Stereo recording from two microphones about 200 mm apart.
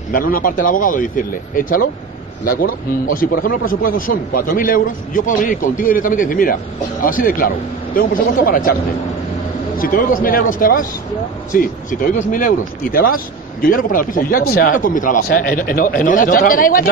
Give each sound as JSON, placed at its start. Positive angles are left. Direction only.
{"t": 0.1, "sound": "a man's voice", "side_deg": 45}
{"t": 9.8, "sound": "a man's voice", "side_deg": 45}